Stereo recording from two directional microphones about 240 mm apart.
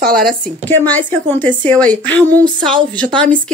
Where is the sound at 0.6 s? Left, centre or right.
Centre.